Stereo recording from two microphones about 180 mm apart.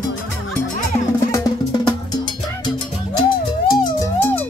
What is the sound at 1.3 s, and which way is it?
Music, 20° left (ahead or behind).